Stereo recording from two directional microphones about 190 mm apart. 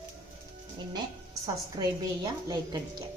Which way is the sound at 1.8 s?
20° right (ahead or behind).